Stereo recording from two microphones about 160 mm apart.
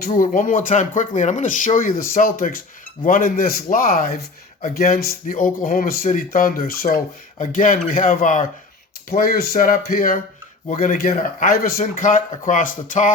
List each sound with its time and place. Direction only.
0.0 s speech: 55° left (ahead or behind)
9.0 s speech: 65° left (ahead or behind)